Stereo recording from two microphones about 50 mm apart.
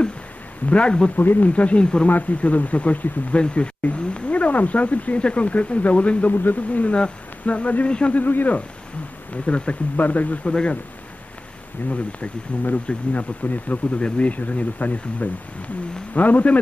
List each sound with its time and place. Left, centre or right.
0.7 s speech: left
1.1 s a man's voice: left
1.5 s speech: left
2.0 s speech: left
6.3 s speech: left
8.2 s a man's voice: left
9.5 s a man's voice: left
10.4 s speech: left
11.9 s a man's voice: left